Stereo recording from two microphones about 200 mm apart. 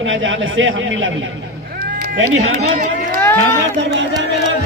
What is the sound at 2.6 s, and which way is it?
Speech, 45° right (ahead or behind).